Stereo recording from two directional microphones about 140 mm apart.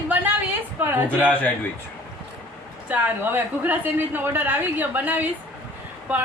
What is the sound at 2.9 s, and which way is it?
A woman's voice, 15° right (ahead or behind).